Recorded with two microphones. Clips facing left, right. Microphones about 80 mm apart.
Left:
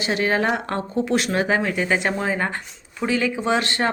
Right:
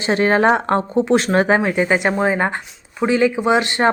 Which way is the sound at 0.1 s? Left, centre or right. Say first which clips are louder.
Right 7 dB; right.